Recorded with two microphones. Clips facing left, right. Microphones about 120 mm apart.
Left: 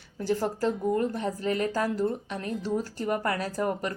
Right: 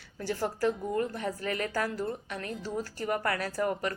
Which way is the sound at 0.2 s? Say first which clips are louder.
Left 3 dB; 25° left (ahead or behind).